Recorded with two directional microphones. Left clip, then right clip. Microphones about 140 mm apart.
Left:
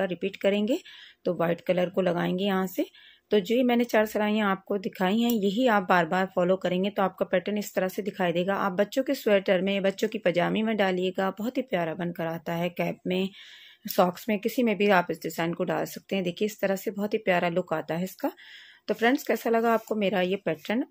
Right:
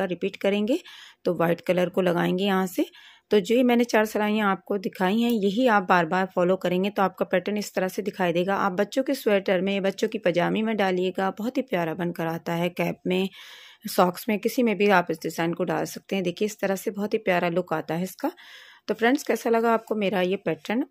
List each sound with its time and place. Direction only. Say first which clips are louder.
0.0 s speech: right 1 dB; 30° right (ahead or behind)